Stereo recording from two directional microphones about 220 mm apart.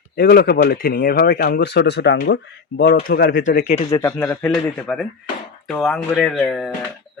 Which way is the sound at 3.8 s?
15° left (ahead or behind).